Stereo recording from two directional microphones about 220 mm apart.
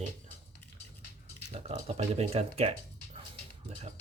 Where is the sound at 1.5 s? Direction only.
30° right (ahead or behind).